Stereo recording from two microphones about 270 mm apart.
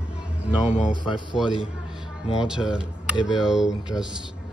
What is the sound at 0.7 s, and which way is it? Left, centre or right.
Speech, centre.